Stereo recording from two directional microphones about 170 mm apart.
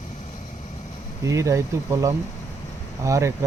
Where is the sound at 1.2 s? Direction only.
20° right (ahead or behind).